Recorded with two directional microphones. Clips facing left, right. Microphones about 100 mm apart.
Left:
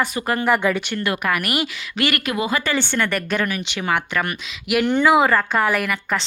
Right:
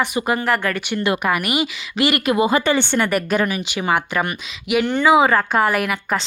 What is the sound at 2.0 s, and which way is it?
Speech, 30° right (ahead or behind).